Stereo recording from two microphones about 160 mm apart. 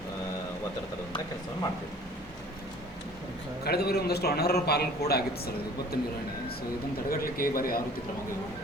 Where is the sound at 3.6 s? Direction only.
80° left.